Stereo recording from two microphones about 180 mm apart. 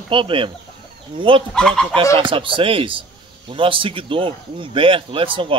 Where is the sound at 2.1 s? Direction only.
30° right (ahead or behind).